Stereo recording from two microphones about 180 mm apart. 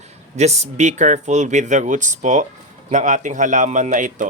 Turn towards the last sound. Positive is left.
turn(degrees=-45)  # may be behind; listen again after turning